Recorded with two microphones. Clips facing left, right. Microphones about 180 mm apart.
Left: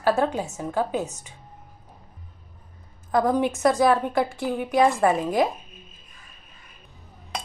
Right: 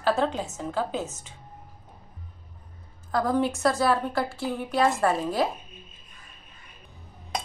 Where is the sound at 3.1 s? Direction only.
20° left (ahead or behind).